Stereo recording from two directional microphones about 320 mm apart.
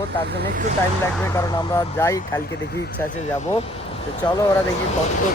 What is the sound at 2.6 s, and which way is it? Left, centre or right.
Speech, left.